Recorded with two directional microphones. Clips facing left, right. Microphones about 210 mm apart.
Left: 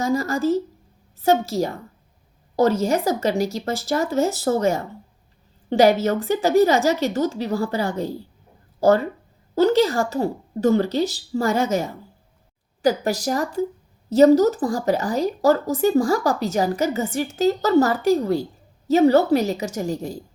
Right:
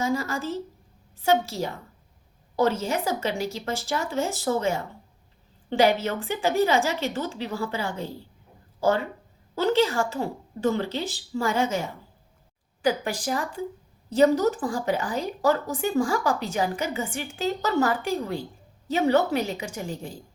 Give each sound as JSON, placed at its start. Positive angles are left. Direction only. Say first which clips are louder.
{"t": 0.1, "sound": "a woman's voice", "louder": "left 7 dB", "side_deg": 45}
{"t": 2.8, "sound": "a woman's voice", "louder": "left 6 dB", "side_deg": 40}
{"t": 9.6, "sound": "a woman's voice", "louder": "left 5 dB", "side_deg": 40}